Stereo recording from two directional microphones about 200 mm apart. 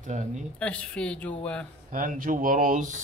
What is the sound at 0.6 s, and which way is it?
A man's voice, 5° left (ahead or behind).